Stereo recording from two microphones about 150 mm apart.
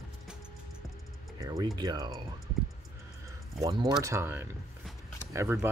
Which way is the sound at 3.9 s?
20° right (ahead or behind).